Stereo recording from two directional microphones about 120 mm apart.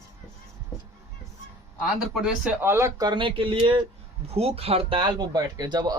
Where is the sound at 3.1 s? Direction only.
45° right (ahead or behind).